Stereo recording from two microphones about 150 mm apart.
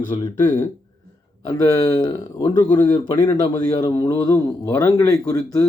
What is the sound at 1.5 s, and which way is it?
A man's voice, 25° left (ahead or behind).